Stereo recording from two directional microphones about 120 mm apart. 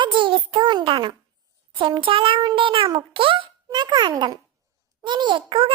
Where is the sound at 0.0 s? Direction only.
45° right (ahead or behind).